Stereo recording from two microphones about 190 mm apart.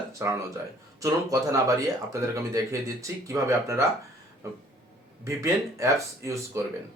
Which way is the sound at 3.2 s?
15° right (ahead or behind).